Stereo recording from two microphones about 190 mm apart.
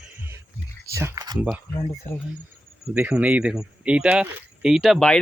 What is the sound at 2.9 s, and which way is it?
Speech, 5° right (ahead or behind).